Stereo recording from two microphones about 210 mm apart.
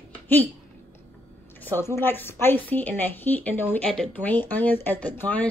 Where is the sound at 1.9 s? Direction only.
10° left (ahead or behind).